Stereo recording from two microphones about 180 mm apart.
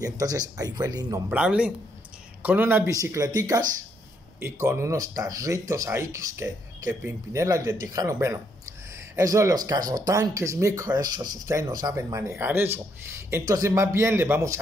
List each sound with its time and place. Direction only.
0.0 s speech: 20° right (ahead or behind)
1.3 s speech: 5° right (ahead or behind)